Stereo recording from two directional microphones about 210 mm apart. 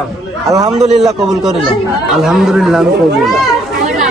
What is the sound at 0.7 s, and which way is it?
Speech, 30° right (ahead or behind).